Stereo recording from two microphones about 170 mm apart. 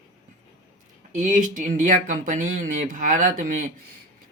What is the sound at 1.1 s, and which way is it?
Speech, 50° right (ahead or behind).